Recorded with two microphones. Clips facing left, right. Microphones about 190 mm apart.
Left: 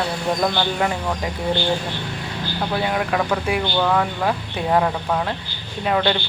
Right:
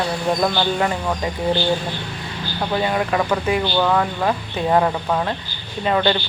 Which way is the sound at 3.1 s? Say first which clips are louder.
Right 2 dB; centre (ahead or behind).